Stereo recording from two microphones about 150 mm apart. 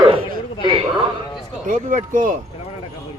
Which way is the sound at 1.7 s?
60° right (ahead or behind).